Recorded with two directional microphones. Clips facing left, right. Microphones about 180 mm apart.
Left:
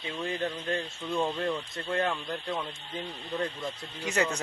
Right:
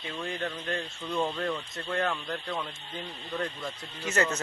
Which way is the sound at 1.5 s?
10° left (ahead or behind).